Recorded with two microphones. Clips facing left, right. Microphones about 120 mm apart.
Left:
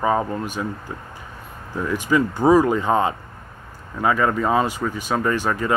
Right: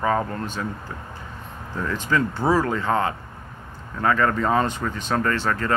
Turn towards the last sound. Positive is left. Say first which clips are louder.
# left 2 dB
turn(degrees=15)  # may be behind; listen again after turning